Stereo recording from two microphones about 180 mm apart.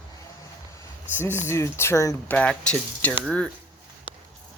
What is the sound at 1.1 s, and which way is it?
Speech, 10° left (ahead or behind).